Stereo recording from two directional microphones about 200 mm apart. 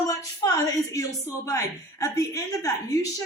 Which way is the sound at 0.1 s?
15° left (ahead or behind).